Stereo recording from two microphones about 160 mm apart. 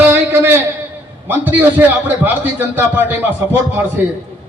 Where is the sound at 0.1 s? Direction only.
10° right (ahead or behind).